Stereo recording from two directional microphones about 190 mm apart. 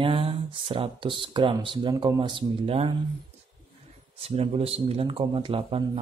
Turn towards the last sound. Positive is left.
turn(degrees=-30)  # may be behind; listen again after turning